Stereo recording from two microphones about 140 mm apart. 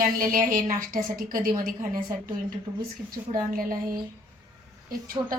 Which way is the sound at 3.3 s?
85° right.